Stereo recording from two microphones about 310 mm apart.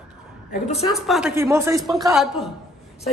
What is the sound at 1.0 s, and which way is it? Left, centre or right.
A woman's voice, centre.